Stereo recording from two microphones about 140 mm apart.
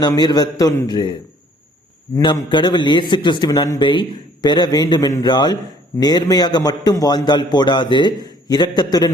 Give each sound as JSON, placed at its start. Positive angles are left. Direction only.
{"t": 0.0, "sound": "a man's voice", "side_deg": 30}
{"t": 2.1, "sound": "a man's voice", "side_deg": 30}